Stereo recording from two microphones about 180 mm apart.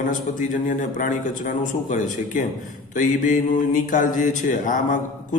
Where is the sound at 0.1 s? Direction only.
45° left (ahead or behind).